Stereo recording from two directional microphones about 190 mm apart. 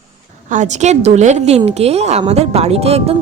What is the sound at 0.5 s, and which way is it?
A woman's voice, 40° right (ahead or behind).